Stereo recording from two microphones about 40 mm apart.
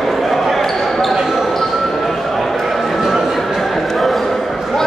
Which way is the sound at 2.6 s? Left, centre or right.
Centre.